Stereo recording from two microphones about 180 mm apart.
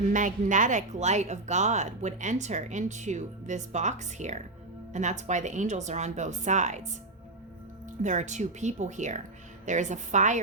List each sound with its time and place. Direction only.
0.1 s speech: 45° right (ahead or behind)
8.0 s a woman's voice: 40° right (ahead or behind)